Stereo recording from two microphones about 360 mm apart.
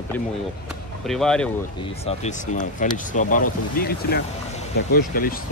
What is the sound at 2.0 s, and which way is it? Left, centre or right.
Speech, centre.